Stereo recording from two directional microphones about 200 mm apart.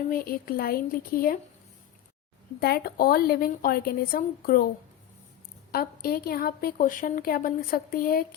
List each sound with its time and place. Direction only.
0.1 s a woman's voice: 50° left (ahead or behind)
2.6 s a woman's voice: 50° left (ahead or behind)
5.7 s a woman's voice: 50° left (ahead or behind)